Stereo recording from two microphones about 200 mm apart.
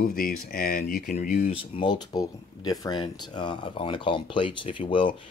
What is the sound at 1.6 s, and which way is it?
Speech, 25° left (ahead or behind).